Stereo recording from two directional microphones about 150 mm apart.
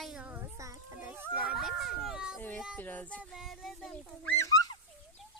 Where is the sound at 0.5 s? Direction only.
20° right (ahead or behind); by 2.4 s 5° right (ahead or behind).